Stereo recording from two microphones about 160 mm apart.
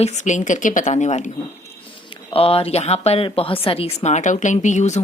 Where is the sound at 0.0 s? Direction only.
45° left (ahead or behind).